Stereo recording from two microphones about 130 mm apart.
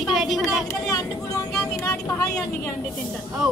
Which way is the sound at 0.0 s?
Centre (ahead or behind).